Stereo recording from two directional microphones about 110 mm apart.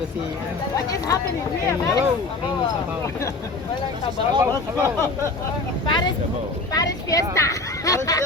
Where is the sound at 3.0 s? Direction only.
30° left (ahead or behind).